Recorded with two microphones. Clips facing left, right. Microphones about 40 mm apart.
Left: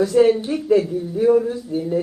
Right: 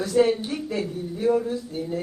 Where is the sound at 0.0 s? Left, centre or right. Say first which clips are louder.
Left 6 dB; left.